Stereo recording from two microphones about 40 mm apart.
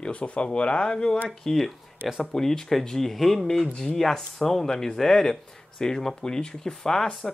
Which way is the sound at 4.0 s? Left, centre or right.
Centre.